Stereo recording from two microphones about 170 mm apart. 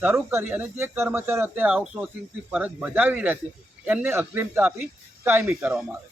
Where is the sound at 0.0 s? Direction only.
15° right (ahead or behind).